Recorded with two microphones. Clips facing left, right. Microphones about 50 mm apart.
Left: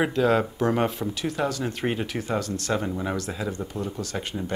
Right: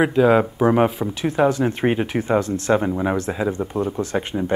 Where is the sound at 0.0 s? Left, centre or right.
Centre.